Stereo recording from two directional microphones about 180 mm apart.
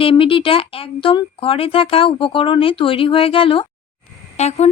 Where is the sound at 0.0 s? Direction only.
30° left (ahead or behind).